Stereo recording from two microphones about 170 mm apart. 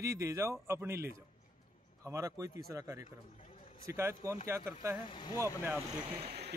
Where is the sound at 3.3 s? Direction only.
40° left (ahead or behind).